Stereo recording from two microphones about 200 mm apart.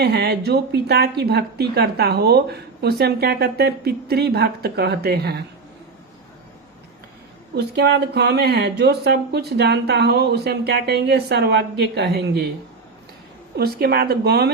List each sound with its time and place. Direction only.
0.0 s a woman's voice: 55° right (ahead or behind)
7.5 s speech: 55° right (ahead or behind)
13.6 s a woman's voice: 50° right (ahead or behind)